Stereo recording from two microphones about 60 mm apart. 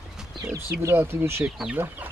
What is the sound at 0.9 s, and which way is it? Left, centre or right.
Speech, right.